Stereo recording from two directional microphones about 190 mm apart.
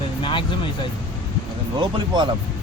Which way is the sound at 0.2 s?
25° left (ahead or behind).